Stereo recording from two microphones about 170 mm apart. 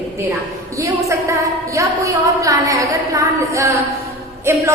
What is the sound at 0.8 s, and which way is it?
A woman's voice, 20° right (ahead or behind).